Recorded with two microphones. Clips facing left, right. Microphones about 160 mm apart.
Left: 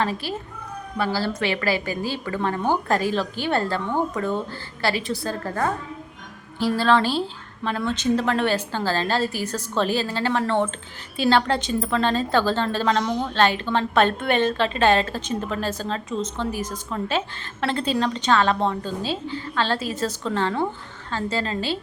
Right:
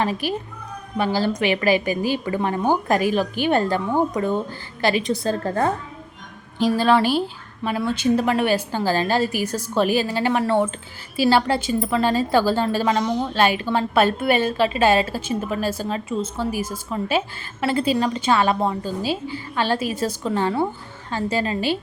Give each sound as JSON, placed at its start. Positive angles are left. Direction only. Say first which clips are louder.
{"t": 0.0, "sound": "a woman's voice", "louder": "right 3 dB", "side_deg": -15}